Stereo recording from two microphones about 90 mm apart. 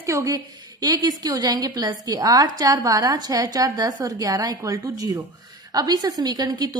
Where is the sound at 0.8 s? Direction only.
45° right (ahead or behind).